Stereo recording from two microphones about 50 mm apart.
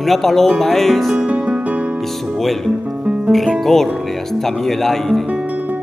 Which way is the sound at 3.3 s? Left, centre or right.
Centre.